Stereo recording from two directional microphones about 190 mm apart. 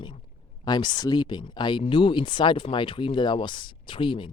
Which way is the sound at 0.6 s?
20° left (ahead or behind).